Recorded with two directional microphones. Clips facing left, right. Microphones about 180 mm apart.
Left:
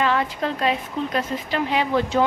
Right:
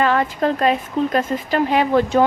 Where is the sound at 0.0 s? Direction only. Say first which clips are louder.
Right 4 dB; 45° right (ahead or behind).